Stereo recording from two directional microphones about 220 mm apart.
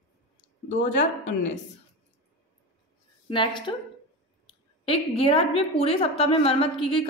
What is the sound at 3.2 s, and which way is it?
A woman's voice, 20° left (ahead or behind).